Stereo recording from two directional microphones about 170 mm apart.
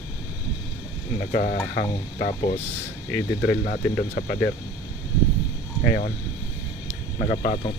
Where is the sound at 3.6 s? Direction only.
60° left (ahead or behind).